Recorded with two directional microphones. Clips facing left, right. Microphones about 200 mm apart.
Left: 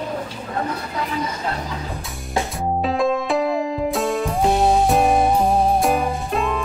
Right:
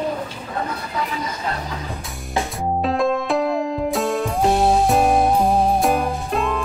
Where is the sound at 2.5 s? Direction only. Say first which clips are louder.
Right 1 dB; centre (ahead or behind).